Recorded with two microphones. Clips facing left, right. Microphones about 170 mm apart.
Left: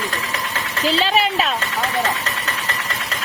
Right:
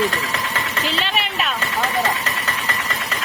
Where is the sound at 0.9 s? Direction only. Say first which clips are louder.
Left 6 dB; 35° left (ahead or behind).